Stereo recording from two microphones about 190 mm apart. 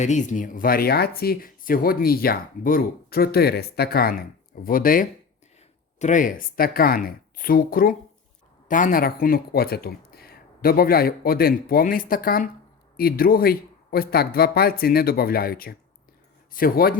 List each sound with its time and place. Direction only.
0.0 s speech: 40° left (ahead or behind)